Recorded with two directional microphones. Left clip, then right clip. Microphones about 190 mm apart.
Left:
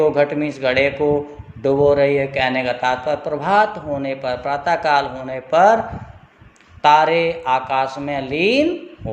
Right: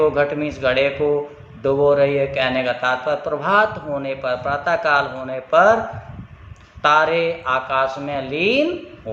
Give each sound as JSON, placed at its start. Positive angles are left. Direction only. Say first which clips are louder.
{"t": 0.0, "sound": "a man's voice", "louder": "left 1 dB", "side_deg": 20}
{"t": 6.8, "sound": "a man's voice", "louder": "left 2 dB", "side_deg": 25}